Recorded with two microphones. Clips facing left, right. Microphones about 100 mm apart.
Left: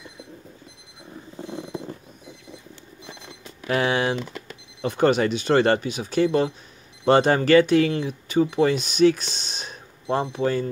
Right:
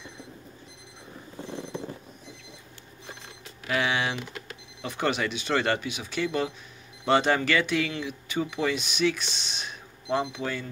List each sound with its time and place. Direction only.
3.6 s speech: 40° left (ahead or behind)